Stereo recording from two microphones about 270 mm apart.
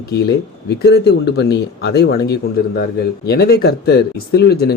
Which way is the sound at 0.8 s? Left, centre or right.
Left.